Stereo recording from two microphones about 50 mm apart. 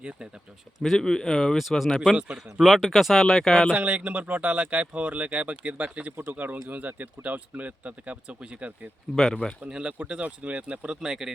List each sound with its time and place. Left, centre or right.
0.0 s speech: right
0.9 s speech: centre
2.1 s speech: centre
3.7 s speech: right
9.1 s speech: centre
9.6 s speech: centre
11.0 s speech: centre